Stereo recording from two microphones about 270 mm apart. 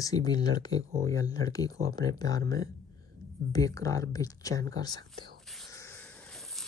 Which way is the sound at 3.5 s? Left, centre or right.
Centre.